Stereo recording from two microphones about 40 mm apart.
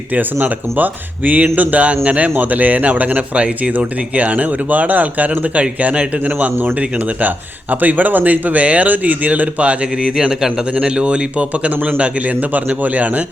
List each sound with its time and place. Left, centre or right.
0.1 s speech: right
3.3 s a man's voice: right
10.2 s a man's voice: centre; by 13.2 s right